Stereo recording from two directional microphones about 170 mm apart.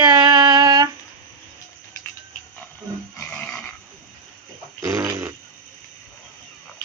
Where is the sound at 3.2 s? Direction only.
5° left (ahead or behind).